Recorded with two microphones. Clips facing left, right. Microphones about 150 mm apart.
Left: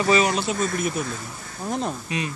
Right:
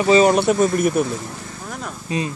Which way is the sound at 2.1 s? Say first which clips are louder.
Right 5 dB; 30° right (ahead or behind).